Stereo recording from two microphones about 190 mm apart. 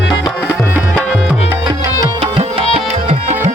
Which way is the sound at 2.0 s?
30° right (ahead or behind).